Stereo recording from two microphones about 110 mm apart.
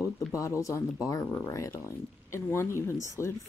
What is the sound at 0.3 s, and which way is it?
Speech, 30° left (ahead or behind).